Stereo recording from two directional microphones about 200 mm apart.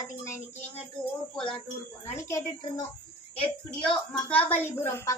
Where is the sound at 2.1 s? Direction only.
15° left (ahead or behind).